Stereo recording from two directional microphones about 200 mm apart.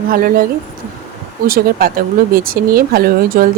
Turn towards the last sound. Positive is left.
turn(degrees=-45)  # may be behind; listen again after turning